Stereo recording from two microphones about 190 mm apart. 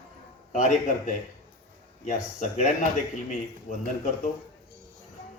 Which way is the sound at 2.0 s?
40° left (ahead or behind).